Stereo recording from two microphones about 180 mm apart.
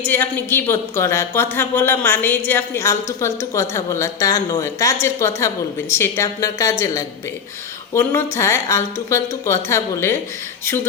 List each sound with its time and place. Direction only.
0.0 s a woman's voice: 10° left (ahead or behind)